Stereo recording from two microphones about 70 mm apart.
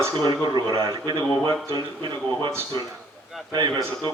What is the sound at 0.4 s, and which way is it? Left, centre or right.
Speech, right.